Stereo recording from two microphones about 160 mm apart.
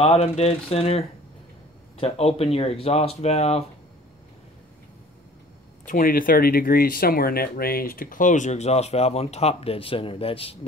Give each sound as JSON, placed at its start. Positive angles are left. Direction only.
{"t": 0.0, "sound": "speech", "side_deg": 40}
{"t": 5.9, "sound": "speech", "side_deg": 60}